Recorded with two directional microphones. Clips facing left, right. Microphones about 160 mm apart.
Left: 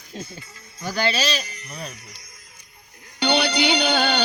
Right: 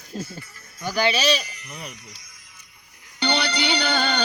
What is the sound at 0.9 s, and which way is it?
Speech, 10° right (ahead or behind).